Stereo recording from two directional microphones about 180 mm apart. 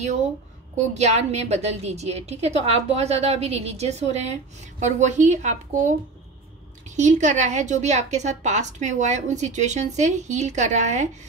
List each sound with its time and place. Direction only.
0.7 s a woman's voice: 40° right (ahead or behind)
7.0 s a woman's voice: 40° right (ahead or behind)